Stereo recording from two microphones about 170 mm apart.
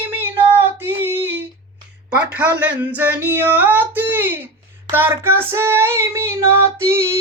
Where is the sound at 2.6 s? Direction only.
10° right (ahead or behind).